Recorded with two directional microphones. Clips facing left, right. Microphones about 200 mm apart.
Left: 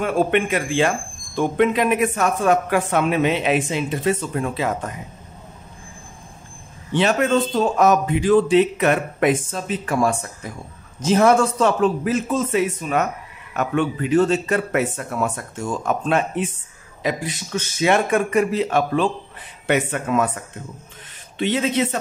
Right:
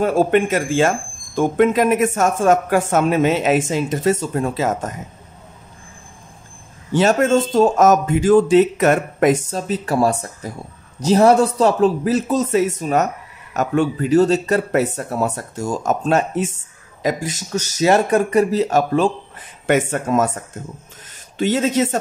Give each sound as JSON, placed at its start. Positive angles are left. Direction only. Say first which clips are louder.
{"t": 0.0, "sound": "speech", "louder": "right 4 dB", "side_deg": -40}
{"t": 6.9, "sound": "a man's voice", "louder": "right 3 dB", "side_deg": -45}